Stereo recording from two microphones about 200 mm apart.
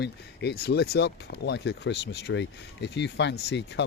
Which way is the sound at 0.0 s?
55° left (ahead or behind).